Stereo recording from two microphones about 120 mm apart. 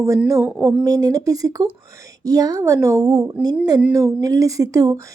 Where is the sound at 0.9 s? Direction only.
30° right (ahead or behind).